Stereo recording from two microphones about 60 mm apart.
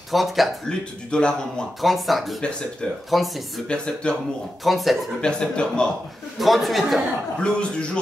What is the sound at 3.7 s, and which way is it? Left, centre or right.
Speech, centre.